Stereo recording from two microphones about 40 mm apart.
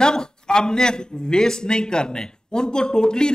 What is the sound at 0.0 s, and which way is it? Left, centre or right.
A man's voice, centre.